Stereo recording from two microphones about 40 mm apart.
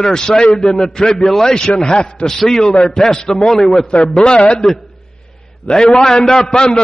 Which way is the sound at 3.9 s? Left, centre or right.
Left.